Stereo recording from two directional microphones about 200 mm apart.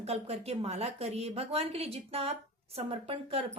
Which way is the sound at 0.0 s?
30° right (ahead or behind).